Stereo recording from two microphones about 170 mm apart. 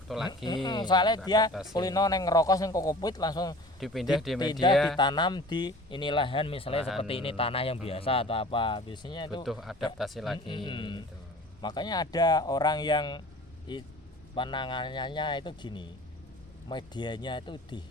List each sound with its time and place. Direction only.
0.1 s speech: centre (ahead or behind)
0.4 s a man's voice: 25° left (ahead or behind)
3.8 s speech: centre (ahead or behind)
4.9 s a man's voice: 25° left (ahead or behind)
9.4 s speech: centre (ahead or behind)
10.3 s a man's voice: 30° left (ahead or behind)